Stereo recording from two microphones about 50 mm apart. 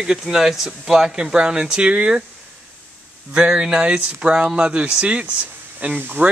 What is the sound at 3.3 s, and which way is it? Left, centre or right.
Speech, centre.